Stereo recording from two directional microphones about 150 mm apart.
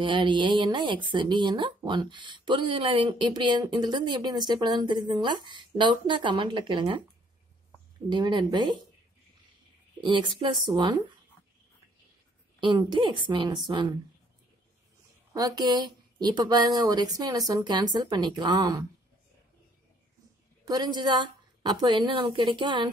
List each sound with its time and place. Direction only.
0.0 s speech: 35° right (ahead or behind)
8.1 s speech: 30° right (ahead or behind)
9.9 s speech: 35° right (ahead or behind)
12.5 s speech: 30° right (ahead or behind)
15.3 s speech: 25° right (ahead or behind)
20.6 s speech: 30° right (ahead or behind)